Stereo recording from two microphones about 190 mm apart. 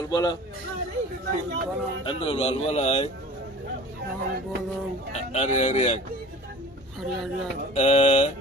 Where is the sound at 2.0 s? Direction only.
30° left (ahead or behind).